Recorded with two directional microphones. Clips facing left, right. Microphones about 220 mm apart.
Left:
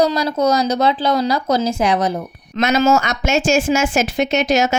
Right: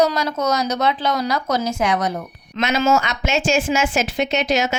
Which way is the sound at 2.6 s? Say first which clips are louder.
Left 3 dB; 45° left (ahead or behind).